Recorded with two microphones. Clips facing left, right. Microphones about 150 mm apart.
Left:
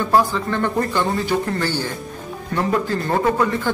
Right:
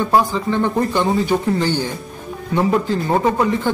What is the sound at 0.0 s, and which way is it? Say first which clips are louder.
A man's voice: right 1 dB; 15° right (ahead or behind).